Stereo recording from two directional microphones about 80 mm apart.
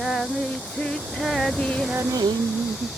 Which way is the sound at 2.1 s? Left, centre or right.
Right.